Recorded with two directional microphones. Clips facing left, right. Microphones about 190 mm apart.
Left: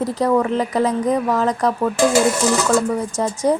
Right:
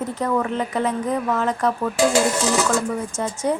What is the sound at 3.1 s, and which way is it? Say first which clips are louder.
Speech: left 5 dB; 35° left (ahead or behind).